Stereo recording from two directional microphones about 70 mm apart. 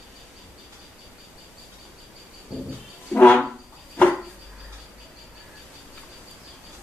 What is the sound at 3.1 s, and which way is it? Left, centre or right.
Music, left.